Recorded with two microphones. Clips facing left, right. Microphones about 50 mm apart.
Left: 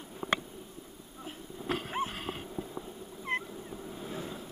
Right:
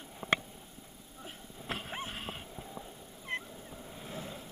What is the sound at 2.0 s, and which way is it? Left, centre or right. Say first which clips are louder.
Horse: left 3 dB; centre.